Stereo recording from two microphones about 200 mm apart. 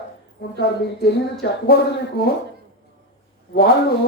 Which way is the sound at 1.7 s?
50° left (ahead or behind).